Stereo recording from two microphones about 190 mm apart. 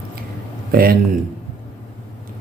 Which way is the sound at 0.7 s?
50° right (ahead or behind).